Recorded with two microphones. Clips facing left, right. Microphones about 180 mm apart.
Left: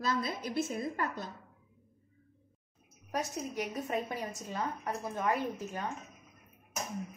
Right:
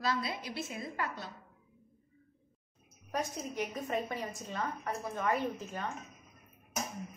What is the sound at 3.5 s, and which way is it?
A woman's voice, 10° left (ahead or behind).